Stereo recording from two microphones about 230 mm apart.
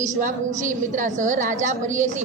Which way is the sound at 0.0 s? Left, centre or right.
Right.